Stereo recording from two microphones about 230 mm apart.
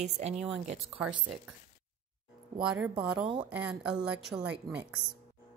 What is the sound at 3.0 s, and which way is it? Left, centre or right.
Speech, right.